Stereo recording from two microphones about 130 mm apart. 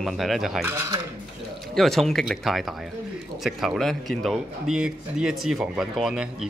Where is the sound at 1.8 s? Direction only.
Centre (ahead or behind).